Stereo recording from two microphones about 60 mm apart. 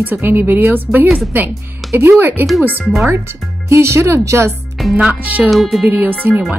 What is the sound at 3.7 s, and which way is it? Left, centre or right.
Speech, right.